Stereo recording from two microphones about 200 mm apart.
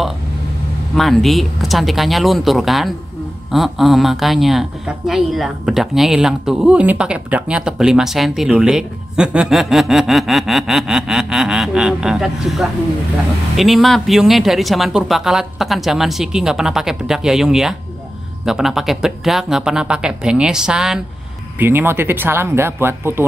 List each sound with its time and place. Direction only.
0.9 s speech: centre (ahead or behind)